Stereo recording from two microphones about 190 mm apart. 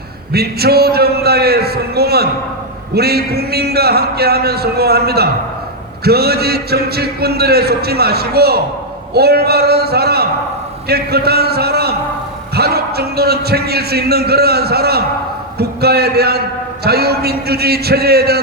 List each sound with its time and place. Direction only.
0.3 s a man's voice: 55° right (ahead or behind)